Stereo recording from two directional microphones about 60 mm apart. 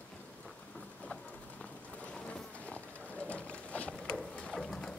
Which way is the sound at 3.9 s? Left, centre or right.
Centre.